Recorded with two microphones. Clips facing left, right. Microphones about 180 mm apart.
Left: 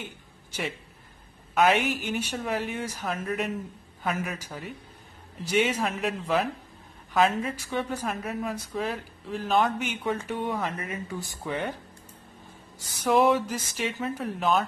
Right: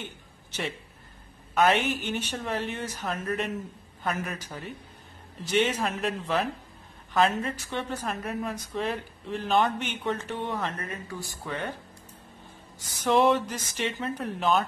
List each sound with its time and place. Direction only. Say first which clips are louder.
0.0 s a sound: even; 10° left (ahead or behind)
1.5 s a woman's voice: left 1 dB; 5° left (ahead or behind)
10.9 s speech: left 2 dB; 15° left (ahead or behind)
12.7 s a woman's voice: left 1 dB; 5° left (ahead or behind)